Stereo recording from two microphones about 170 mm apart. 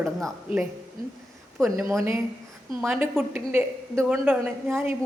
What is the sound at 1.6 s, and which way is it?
A woman's voice, 15° right (ahead or behind).